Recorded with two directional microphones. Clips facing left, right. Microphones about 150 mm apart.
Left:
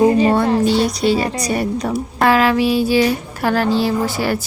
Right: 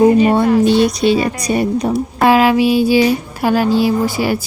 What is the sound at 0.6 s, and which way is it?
Speech, 20° right (ahead or behind).